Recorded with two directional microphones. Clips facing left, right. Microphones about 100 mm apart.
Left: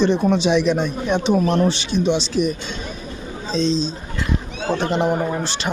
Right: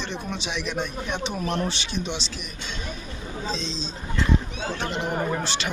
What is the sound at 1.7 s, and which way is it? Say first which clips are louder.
Speech: left 11 dB; 35° left (ahead or behind).